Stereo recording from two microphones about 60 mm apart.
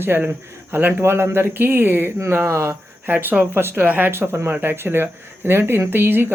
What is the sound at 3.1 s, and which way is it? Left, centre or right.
Speech, right.